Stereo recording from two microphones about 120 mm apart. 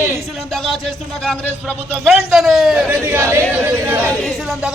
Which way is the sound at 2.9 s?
20° right (ahead or behind).